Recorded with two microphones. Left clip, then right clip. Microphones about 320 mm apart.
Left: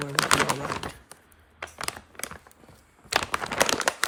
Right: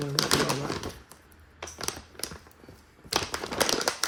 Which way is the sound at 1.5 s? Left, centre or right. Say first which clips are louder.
Left 2 dB; centre.